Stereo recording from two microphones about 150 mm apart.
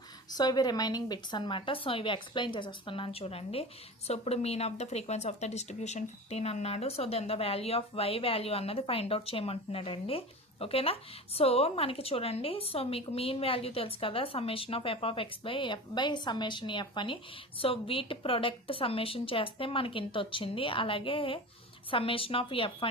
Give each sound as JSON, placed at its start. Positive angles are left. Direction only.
{"t": 0.3, "sound": "speech", "side_deg": 25}